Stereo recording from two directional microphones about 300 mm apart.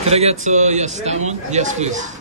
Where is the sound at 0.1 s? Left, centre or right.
Right.